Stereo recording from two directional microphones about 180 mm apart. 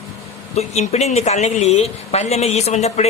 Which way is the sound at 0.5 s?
35° left (ahead or behind).